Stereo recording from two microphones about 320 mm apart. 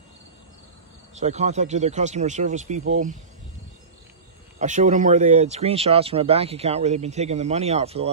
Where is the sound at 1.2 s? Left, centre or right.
Right.